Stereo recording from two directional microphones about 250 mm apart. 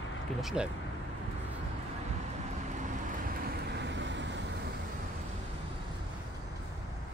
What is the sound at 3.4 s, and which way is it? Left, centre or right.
Vehicle, right.